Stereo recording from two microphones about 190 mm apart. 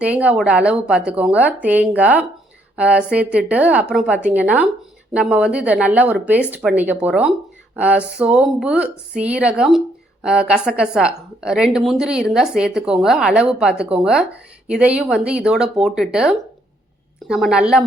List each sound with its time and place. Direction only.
0.0 s a woman's voice: 5° right (ahead or behind)